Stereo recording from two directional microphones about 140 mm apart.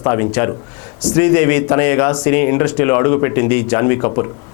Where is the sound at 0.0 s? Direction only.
20° left (ahead or behind).